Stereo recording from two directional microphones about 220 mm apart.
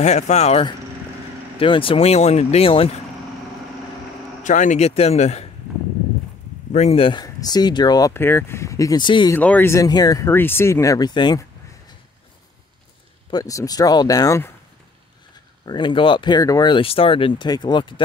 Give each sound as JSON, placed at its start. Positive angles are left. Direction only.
{"t": 0.0, "sound": "speech", "side_deg": 30}
{"t": 4.4, "sound": "speech", "side_deg": 35}
{"t": 6.7, "sound": "speech", "side_deg": 30}
{"t": 9.4, "sound": "speech", "side_deg": 10}
{"t": 13.3, "sound": "speech", "side_deg": 15}
{"t": 15.6, "sound": "speech", "side_deg": 20}